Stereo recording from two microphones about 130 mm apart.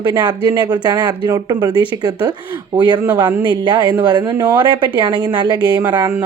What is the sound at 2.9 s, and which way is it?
Speech, 30° right (ahead or behind).